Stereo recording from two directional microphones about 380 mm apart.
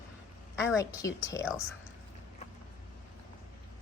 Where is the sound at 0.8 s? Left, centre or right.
Centre.